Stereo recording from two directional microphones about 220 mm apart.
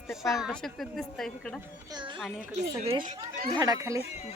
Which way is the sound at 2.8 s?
20° right (ahead or behind).